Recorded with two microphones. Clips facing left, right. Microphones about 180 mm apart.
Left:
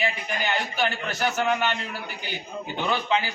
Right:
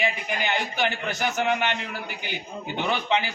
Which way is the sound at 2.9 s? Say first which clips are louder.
Even; 20° right (ahead or behind).